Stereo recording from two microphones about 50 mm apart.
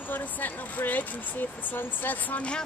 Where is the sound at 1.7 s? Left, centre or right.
Left.